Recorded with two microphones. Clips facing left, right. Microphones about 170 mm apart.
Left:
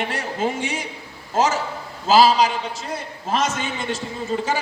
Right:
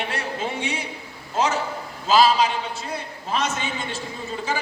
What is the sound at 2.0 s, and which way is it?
Speech, 40° left (ahead or behind).